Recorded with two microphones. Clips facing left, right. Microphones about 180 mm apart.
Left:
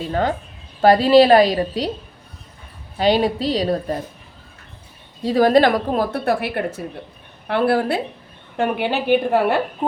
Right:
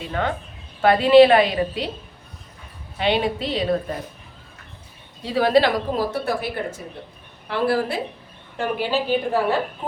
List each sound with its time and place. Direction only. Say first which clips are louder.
0.1 s a woman's voice: left 3 dB; 35° left (ahead or behind)
3.0 s a woman's voice: left 4 dB; 40° left (ahead or behind)
5.2 s speech: left 4 dB; 40° left (ahead or behind); by 9.6 s 65° left (ahead or behind)